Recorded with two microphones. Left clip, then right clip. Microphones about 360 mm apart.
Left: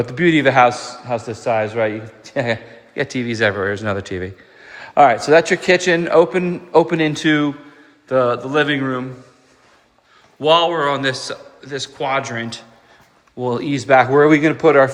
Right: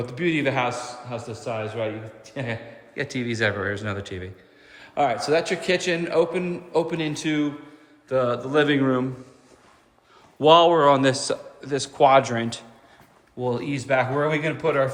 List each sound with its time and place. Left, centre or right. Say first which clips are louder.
0.3 s a man's voice: left 11 dB; centre
8.0 s a man's voice: left 7 dB; centre
10.4 s a man's voice: even; centre
13.4 s speech: left 6 dB; centre